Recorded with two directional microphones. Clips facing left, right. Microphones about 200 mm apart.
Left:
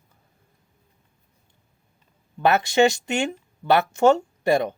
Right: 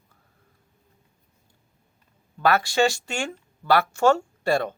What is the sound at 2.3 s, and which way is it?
Speech, 20° left (ahead or behind).